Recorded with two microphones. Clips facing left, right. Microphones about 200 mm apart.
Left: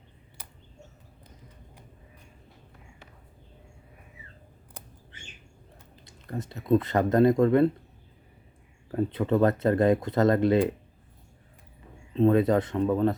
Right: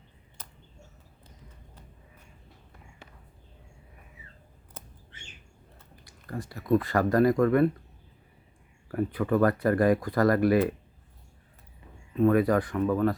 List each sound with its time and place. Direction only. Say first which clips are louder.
0.4 s bird: right 1 dB; 10° left (ahead or behind)
6.1 s speech: left 1 dB; 20° left (ahead or behind)
8.9 s speech: left 1 dB; 25° left (ahead or behind)
12.1 s speech: left 1 dB; 25° left (ahead or behind)